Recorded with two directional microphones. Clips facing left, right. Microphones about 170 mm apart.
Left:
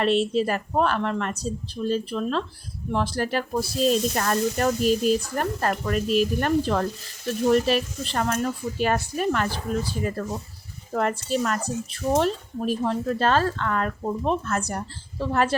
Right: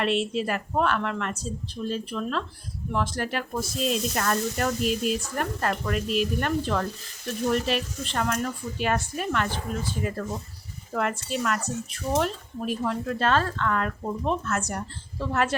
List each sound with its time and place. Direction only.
0.0 s speech: 35° left (ahead or behind)
10.9 s speech: 35° left (ahead or behind)